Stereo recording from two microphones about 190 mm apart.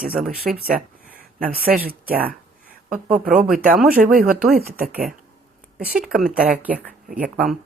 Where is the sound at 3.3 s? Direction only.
5° right (ahead or behind).